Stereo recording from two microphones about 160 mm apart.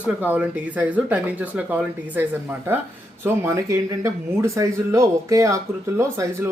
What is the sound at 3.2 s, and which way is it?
Speech, 20° right (ahead or behind).